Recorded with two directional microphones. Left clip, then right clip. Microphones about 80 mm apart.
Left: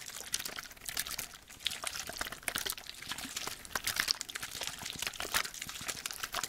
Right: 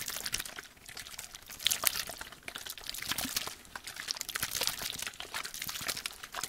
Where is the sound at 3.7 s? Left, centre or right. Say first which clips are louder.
Left 8 dB; left.